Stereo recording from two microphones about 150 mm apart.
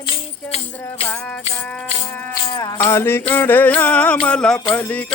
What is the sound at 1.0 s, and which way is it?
Music, 10° left (ahead or behind).